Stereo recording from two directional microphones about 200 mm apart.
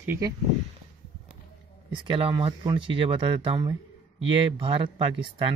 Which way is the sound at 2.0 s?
25° right (ahead or behind).